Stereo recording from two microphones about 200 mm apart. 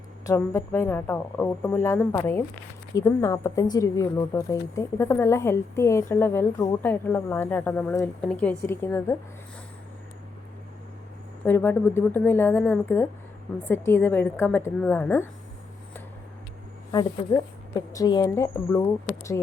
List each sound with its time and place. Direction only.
0.3 s speech: 15° left (ahead or behind)
11.4 s speech: 10° left (ahead or behind)
17.7 s speech: 20° left (ahead or behind)